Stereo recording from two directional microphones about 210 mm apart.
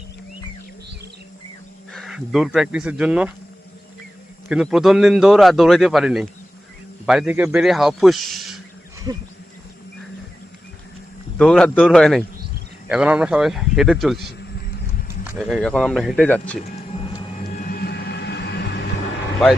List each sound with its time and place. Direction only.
1.9 s speech: centre (ahead or behind)
4.4 s a man's voice: centre (ahead or behind)
11.3 s a man's voice: 5° left (ahead or behind)
15.4 s a man's voice: centre (ahead or behind)
16.9 s music: 25° left (ahead or behind)
17.3 s vehicle: 35° left (ahead or behind); by 18.8 s 50° left (ahead or behind)